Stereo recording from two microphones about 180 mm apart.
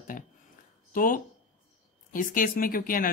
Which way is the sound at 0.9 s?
50° left (ahead or behind).